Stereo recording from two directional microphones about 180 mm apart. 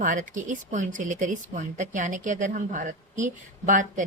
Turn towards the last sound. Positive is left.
turn(degrees=-45)  # may be behind; listen again after turning